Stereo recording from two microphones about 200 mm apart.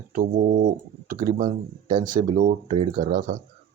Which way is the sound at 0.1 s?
40° right (ahead or behind).